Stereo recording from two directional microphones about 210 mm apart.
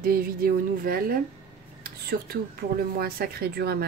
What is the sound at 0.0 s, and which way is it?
A woman's voice, 45° right (ahead or behind).